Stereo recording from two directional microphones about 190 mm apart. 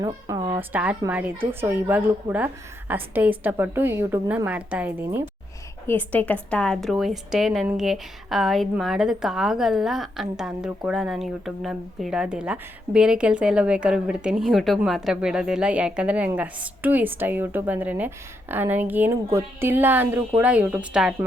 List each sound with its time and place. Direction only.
0.0 s speech: 20° right (ahead or behind)
0.7 s speech: 10° right (ahead or behind)
5.9 s a woman's voice: 10° left (ahead or behind)